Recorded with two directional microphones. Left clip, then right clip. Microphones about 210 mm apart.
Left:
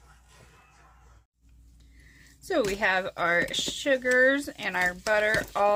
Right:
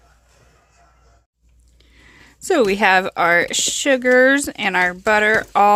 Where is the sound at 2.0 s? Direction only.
55° right (ahead or behind).